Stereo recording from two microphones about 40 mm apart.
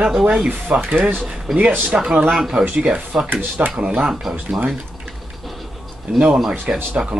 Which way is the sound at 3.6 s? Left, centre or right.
Right.